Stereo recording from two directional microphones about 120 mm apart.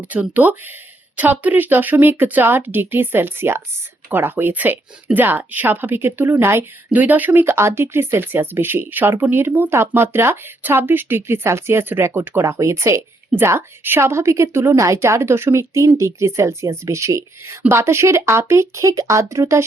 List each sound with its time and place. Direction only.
0.0 s speech: 15° right (ahead or behind)